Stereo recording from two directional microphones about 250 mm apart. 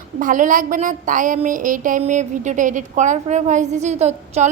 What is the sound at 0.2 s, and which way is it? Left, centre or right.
A woman's voice, right.